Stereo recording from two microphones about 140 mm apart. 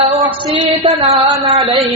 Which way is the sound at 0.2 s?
35° right (ahead or behind).